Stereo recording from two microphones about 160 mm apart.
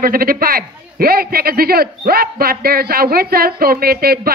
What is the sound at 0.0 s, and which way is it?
A man's voice, 65° right (ahead or behind).